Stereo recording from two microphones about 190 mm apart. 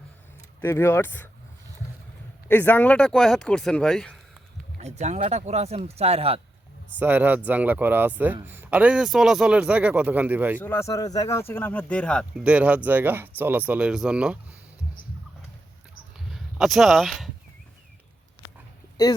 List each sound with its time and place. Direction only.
0.6 s speech: 15° left (ahead or behind)
2.5 s speech: 10° left (ahead or behind)
4.8 s speech: 35° right (ahead or behind)
7.0 s speech: 10° right (ahead or behind)
10.6 s speech: 15° left (ahead or behind)
12.4 s speech: 5° right (ahead or behind)
16.1 s a sound: centre (ahead or behind)